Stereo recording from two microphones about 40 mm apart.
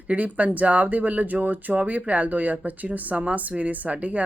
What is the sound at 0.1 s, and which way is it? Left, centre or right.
A woman's voice, right.